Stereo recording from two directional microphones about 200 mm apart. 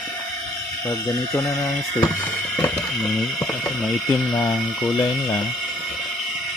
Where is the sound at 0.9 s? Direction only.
15° left (ahead or behind).